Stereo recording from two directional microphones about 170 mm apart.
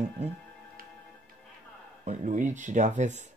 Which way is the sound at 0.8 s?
60° right (ahead or behind).